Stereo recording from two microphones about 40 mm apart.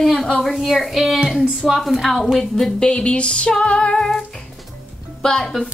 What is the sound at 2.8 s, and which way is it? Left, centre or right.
Music, left.